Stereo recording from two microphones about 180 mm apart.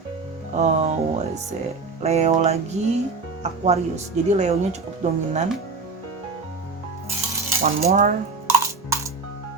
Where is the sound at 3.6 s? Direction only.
40° right (ahead or behind).